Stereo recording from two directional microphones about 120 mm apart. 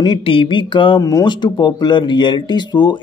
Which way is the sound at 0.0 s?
45° left (ahead or behind).